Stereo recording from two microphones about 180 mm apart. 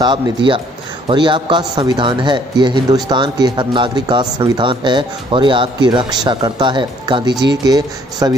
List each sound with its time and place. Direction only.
0.0 s speech: 25° right (ahead or behind)